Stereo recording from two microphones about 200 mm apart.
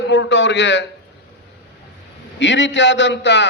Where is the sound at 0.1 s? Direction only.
65° left (ahead or behind).